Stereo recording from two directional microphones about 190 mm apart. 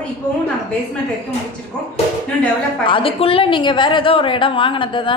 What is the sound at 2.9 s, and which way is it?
A woman's voice, 30° left (ahead or behind).